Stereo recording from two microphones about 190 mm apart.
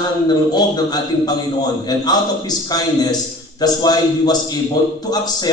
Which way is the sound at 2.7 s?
20° left (ahead or behind).